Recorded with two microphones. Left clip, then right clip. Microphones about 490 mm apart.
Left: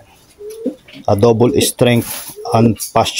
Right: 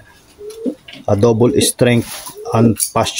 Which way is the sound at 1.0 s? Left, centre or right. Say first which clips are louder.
Left 1 dB; left.